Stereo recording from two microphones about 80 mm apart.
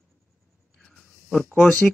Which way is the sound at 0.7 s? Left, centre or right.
Centre.